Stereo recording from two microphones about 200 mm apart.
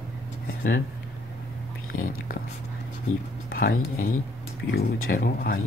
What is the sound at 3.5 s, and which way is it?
Speech, 45° left (ahead or behind).